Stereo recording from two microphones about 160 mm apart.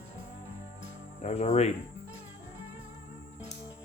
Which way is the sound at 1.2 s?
45° left (ahead or behind).